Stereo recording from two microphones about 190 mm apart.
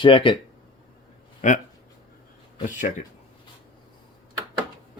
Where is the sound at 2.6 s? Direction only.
45° left (ahead or behind).